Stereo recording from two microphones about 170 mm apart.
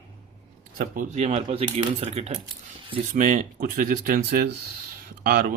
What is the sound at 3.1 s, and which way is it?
Speech, 50° right (ahead or behind).